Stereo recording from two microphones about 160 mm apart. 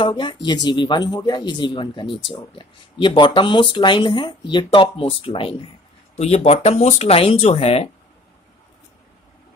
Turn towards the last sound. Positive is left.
turn(degrees=40)  # may be behind; listen again after turning